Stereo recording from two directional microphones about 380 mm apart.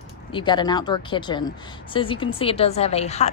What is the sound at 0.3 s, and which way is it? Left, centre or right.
A woman's voice, centre.